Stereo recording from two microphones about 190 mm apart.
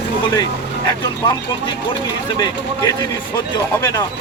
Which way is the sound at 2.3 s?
20° left (ahead or behind).